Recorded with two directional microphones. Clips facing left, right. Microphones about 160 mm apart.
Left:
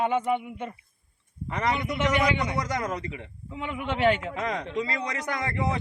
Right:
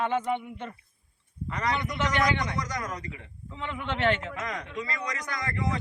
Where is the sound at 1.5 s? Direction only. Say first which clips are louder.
Left 3 dB; 25° left (ahead or behind).